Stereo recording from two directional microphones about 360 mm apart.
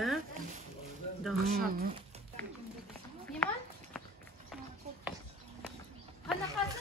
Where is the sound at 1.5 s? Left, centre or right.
Right.